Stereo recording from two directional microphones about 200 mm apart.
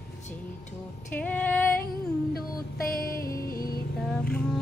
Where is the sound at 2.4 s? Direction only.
45° left (ahead or behind).